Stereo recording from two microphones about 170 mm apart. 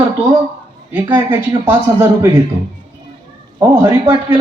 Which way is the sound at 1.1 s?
15° right (ahead or behind).